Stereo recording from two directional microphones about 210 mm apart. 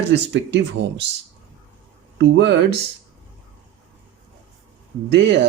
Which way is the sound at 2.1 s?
55° right (ahead or behind).